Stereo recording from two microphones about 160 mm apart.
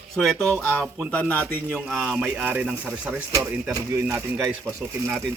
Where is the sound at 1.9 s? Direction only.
Centre (ahead or behind); by 5.3 s 20° right (ahead or behind).